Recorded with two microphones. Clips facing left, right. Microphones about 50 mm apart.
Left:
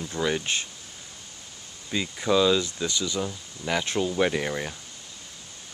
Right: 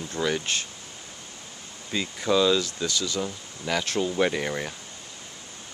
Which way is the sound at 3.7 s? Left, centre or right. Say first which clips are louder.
Even; centre.